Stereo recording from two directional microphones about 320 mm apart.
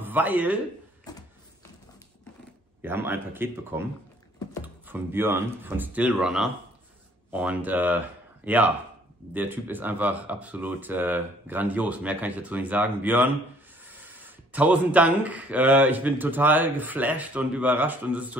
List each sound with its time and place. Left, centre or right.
0.0 s speech: centre
1.1 s a sound: centre
2.8 s a man's voice: centre
4.8 s speech: centre